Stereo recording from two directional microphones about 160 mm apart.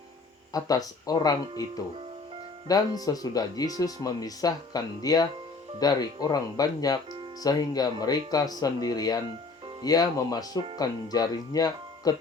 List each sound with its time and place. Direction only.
0.5 s speech: 25° left (ahead or behind)